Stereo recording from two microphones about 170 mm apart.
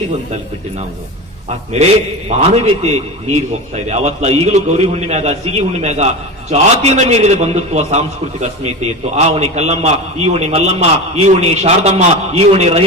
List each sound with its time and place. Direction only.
1.8 s a man's voice: 40° right (ahead or behind)